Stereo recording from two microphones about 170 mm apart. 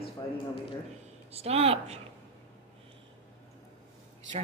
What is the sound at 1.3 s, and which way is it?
Speech, 35° right (ahead or behind).